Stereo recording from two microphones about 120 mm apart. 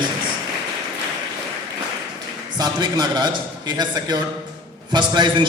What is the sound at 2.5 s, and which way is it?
A man's voice, 35° right (ahead or behind).